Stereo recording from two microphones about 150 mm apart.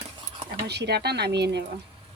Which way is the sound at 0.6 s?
90° right.